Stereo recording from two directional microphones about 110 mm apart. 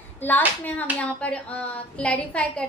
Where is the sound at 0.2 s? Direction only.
15° left (ahead or behind).